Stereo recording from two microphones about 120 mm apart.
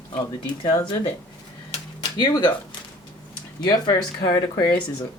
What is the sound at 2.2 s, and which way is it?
Speech, 40° left (ahead or behind).